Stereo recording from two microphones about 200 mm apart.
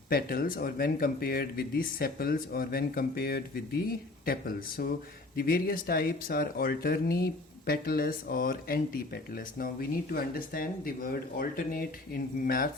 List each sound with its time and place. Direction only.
0.1 s speech: 50° left (ahead or behind)